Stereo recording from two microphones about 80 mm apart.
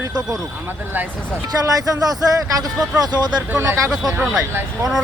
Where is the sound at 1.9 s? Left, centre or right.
Right.